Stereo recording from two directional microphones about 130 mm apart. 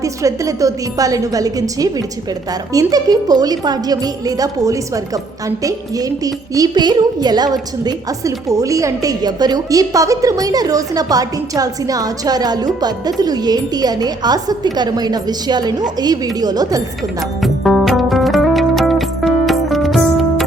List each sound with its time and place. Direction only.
0.0 s a woman's voice: 25° right (ahead or behind)
17.4 s music: centre (ahead or behind)